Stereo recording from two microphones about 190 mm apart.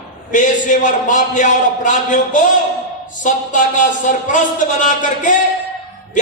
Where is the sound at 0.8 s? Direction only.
40° left (ahead or behind).